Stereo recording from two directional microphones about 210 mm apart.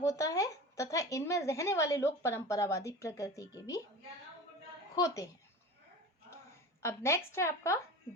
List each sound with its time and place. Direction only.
0.0 s a woman's voice: 15° left (ahead or behind)
4.9 s a woman's voice: 15° left (ahead or behind)
6.8 s a woman's voice: 15° left (ahead or behind)